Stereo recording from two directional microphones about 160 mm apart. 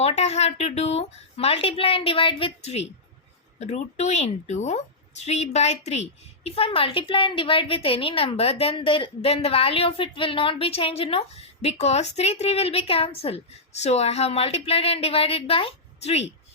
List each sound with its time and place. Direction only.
0.0 s a woman's voice: 45° left (ahead or behind)